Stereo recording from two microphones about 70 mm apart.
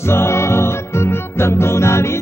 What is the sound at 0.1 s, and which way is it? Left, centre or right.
Music, left.